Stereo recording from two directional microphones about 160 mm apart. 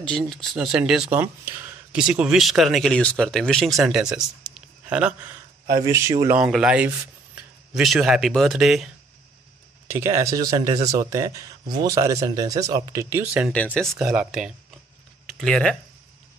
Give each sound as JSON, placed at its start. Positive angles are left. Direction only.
{"t": 0.3, "sound": "speech", "side_deg": 0}
{"t": 5.7, "sound": "speech", "side_deg": -20}
{"t": 6.3, "sound": "speech", "side_deg": -5}
{"t": 9.8, "sound": "speech", "side_deg": -15}